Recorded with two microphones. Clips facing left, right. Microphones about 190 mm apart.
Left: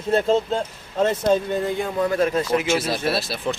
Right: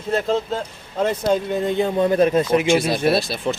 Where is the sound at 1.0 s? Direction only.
10° right (ahead or behind).